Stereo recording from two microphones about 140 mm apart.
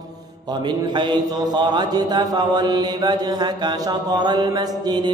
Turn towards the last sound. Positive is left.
turn(degrees=-30)  # may be behind; listen again after turning